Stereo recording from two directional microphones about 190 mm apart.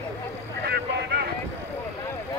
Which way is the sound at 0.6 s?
60° right (ahead or behind).